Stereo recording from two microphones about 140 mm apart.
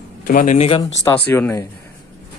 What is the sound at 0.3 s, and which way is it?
Speech, 75° left (ahead or behind).